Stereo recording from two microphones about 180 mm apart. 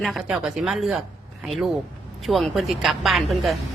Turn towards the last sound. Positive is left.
turn(degrees=0)  # may be behind; listen again after turning